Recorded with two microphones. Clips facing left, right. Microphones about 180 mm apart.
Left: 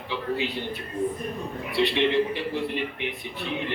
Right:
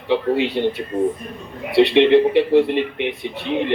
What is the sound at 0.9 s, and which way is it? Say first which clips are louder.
Speech: right 6 dB; 90° right.